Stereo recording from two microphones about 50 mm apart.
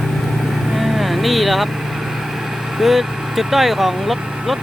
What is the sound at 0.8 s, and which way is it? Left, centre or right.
Vehicle, centre.